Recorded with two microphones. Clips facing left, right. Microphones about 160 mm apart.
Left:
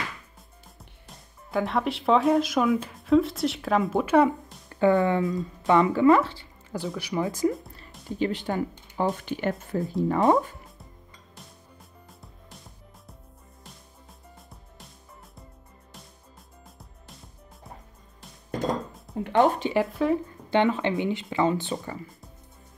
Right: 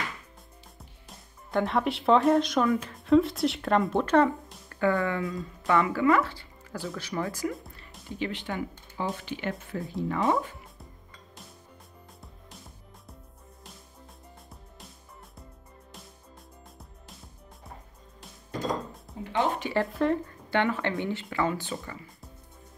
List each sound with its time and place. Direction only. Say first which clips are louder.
0.7 s speech: left 2 dB; centre (ahead or behind)
4.6 s speech: left 5 dB; 20° left (ahead or behind)
7.0 s speech: left 6 dB; 15° left (ahead or behind)
8.2 s speech: left 5 dB; 40° left (ahead or behind)
12.2 s music: even; centre (ahead or behind)
19.1 s music: left 7 dB; 55° left (ahead or behind)
19.9 s speech: left 2 dB; 5° left (ahead or behind)
20.4 s speech: left 4 dB; 20° left (ahead or behind)